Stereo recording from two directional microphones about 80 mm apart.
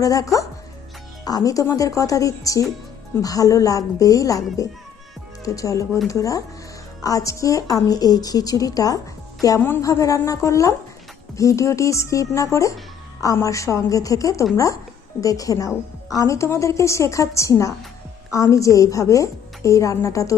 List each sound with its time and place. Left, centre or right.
0.0 s a woman's voice: left